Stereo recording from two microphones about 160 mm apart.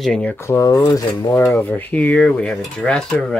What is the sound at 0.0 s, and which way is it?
Speech, 5° left (ahead or behind).